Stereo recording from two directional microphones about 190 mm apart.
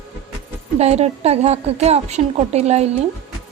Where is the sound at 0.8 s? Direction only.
35° right (ahead or behind).